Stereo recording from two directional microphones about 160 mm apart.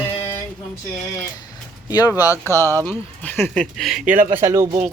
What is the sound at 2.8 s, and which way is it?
Speech, 10° left (ahead or behind).